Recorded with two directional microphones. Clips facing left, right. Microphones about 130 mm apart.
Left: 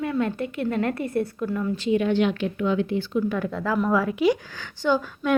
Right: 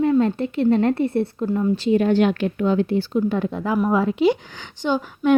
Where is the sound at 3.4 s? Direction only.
20° right (ahead or behind).